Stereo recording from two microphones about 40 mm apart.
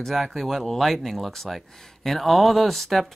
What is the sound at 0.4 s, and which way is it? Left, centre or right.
Speech, centre.